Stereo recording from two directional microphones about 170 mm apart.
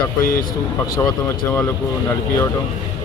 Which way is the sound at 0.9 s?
20° left (ahead or behind).